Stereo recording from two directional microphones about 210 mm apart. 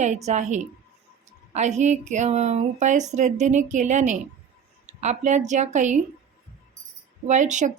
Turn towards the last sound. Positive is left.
turn(degrees=-35)  # may be behind; listen again after turning